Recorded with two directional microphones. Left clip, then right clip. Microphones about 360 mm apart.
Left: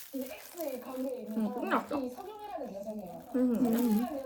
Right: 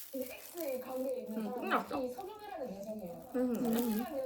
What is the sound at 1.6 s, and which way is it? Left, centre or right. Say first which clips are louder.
Speech: left 2 dB; centre.